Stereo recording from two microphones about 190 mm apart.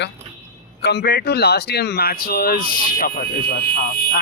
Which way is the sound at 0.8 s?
60° left (ahead or behind).